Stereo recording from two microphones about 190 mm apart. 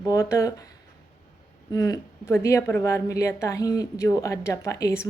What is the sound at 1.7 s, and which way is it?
A woman's voice, 20° left (ahead or behind).